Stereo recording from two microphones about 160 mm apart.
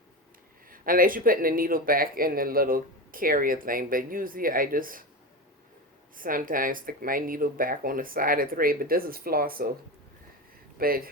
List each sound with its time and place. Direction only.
0.7 s speech: 60° right (ahead or behind)
6.1 s speech: 60° right (ahead or behind)
10.8 s speech: 65° right (ahead or behind)